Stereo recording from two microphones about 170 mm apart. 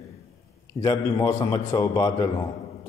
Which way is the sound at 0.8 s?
25° left (ahead or behind).